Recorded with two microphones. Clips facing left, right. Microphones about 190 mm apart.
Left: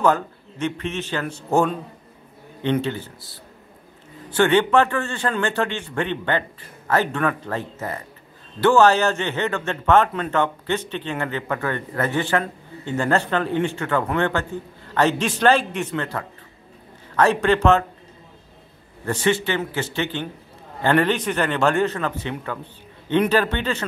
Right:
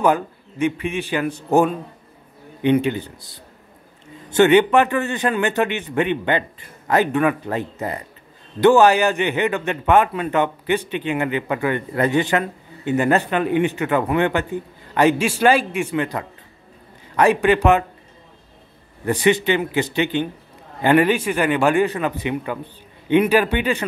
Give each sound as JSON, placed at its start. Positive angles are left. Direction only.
{"t": 0.0, "sound": "a man's voice", "side_deg": -10}
{"t": 4.4, "sound": "a man's voice", "side_deg": -15}
{"t": 19.0, "sound": "a man's voice", "side_deg": -15}